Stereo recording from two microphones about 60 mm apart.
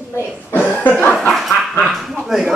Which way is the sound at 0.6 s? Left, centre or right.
Left.